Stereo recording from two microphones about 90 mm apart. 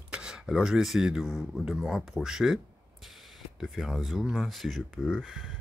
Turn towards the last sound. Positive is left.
turn(degrees=5)  # may be behind; listen again after turning